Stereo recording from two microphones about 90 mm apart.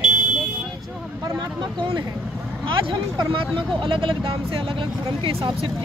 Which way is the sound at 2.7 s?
65° right (ahead or behind).